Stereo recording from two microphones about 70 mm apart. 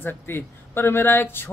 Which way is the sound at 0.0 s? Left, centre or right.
Left.